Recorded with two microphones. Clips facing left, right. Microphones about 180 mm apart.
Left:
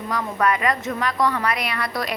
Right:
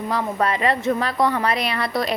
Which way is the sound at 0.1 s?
30° right (ahead or behind).